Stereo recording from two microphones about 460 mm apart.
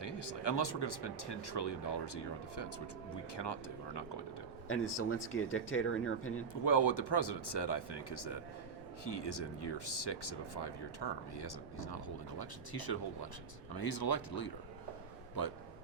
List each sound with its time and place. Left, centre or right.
0.0 s speech: left
4.7 s speech: left
6.5 s speech: left